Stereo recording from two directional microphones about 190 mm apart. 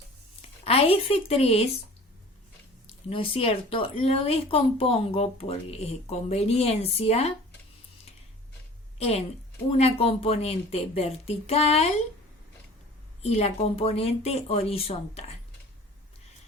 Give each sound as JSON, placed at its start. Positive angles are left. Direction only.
{"t": 0.6, "sound": "speech", "side_deg": 30}
{"t": 3.1, "sound": "speech", "side_deg": 30}
{"t": 9.0, "sound": "a woman's voice", "side_deg": 35}
{"t": 13.2, "sound": "speech", "side_deg": 35}